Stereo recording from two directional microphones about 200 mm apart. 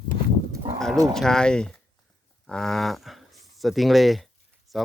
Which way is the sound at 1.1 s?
Centre (ahead or behind).